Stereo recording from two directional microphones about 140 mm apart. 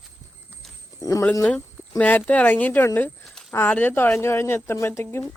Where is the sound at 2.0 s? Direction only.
10° left (ahead or behind).